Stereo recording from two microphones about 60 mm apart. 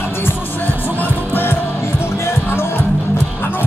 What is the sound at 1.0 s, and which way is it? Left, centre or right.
Music, left.